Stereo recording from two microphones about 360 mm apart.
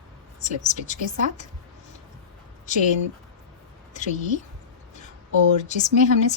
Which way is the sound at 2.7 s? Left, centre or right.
Left.